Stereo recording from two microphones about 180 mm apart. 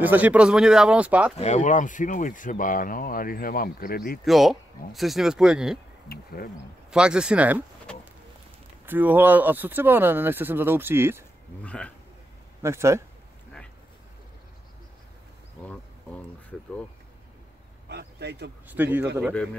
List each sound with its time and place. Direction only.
0.0 s speech: 10° right (ahead or behind)
1.4 s speech: 40° left (ahead or behind); by 4.2 s 55° left (ahead or behind)
4.2 s speech: centre (ahead or behind)
6.0 s speech: 60° left (ahead or behind)
6.9 s speech: 5° right (ahead or behind)
8.8 s speech: 10° right (ahead or behind)
11.6 s a man's voice: 5° left (ahead or behind)
12.6 s speech: 15° right (ahead or behind)
15.6 s speech: 10° left (ahead or behind)
17.8 s a sound: 65° right (ahead or behind)
18.7 s speech: 10° right (ahead or behind)